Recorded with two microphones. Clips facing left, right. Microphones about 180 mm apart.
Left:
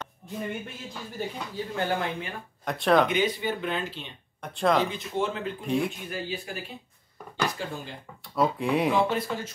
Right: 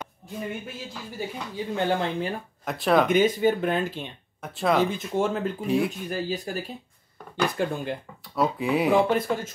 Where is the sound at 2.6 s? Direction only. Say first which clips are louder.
Even; centre (ahead or behind).